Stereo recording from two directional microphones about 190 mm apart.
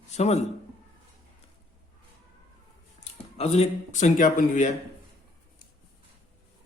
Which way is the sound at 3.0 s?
35° left (ahead or behind).